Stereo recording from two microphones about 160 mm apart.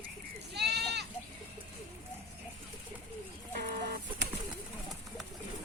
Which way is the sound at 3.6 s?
75° right (ahead or behind).